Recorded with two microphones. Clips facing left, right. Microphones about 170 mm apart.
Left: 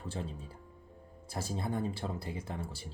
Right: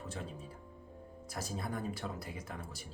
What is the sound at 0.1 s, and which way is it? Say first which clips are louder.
Speech: left 3 dB; 30° left (ahead or behind).